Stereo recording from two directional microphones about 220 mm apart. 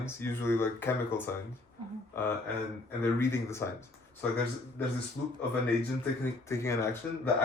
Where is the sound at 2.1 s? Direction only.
10° left (ahead or behind).